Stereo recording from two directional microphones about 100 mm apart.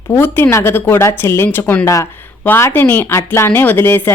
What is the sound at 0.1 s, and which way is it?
Speech, 20° left (ahead or behind).